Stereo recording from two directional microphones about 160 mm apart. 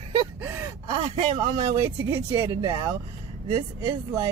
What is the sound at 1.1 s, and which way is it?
Speech, 30° right (ahead or behind).